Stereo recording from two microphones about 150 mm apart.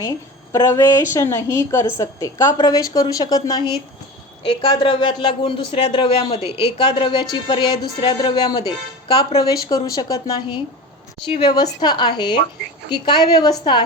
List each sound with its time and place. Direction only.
0.5 s a woman's voice: 20° left (ahead or behind)